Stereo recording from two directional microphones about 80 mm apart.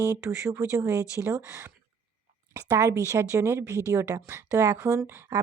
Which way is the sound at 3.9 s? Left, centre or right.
Right.